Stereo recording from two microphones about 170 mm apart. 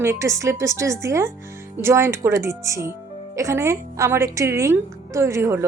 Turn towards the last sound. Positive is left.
turn(degrees=-15)  # may be behind; listen again after turning